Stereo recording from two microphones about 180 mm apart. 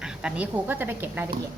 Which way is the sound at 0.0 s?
5° right (ahead or behind).